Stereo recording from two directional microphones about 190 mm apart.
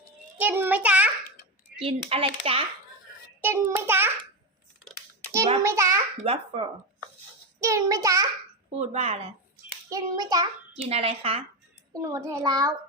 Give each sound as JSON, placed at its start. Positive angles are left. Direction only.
{"t": 0.3, "sound": "child singing", "side_deg": -10}
{"t": 1.8, "sound": "a child's voice", "side_deg": -30}
{"t": 3.4, "sound": "a child's voice", "side_deg": -10}
{"t": 5.6, "sound": "a child's voice", "side_deg": -15}
{"t": 6.2, "sound": "a child's voice", "side_deg": -30}
{"t": 7.6, "sound": "a child's voice", "side_deg": -15}
{"t": 8.8, "sound": "speech", "side_deg": -35}
{"t": 9.9, "sound": "a child's voice", "side_deg": -20}
{"t": 10.8, "sound": "speech", "side_deg": -30}
{"t": 11.9, "sound": "a child's voice", "side_deg": -15}